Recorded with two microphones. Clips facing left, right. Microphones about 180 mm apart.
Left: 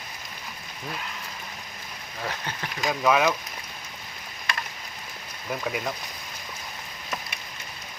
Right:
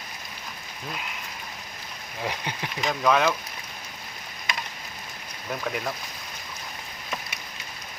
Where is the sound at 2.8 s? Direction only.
5° left (ahead or behind).